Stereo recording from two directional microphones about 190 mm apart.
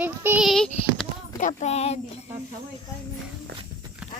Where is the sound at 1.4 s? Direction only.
40° left (ahead or behind).